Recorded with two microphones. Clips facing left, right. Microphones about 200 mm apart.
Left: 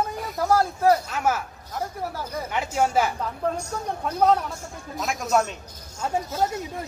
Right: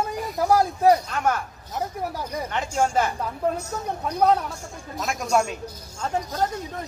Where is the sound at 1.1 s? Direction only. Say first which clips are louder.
Even; 5° left (ahead or behind).